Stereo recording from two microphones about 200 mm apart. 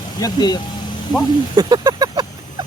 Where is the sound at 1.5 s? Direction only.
20° right (ahead or behind).